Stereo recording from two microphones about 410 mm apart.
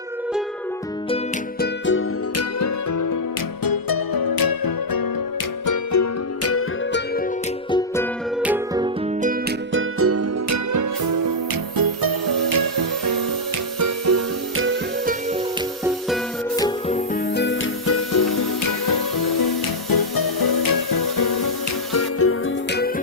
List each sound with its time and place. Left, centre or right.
1.1 s music: left
5.6 s music: left
7.7 s music: centre
8.4 s music: centre
9.7 s music: right
13.7 s music: right
16.6 s music: centre
17.3 s music: left
18.6 s music: left
21.9 s music: left